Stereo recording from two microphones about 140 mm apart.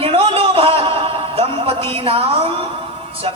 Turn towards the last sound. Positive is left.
turn(degrees=-40)  # may be behind; listen again after turning